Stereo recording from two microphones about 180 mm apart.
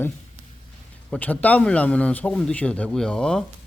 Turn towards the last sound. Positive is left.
turn(degrees=5)  # may be behind; listen again after turning